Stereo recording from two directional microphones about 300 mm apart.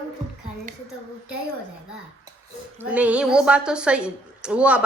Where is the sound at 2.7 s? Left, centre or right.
Centre.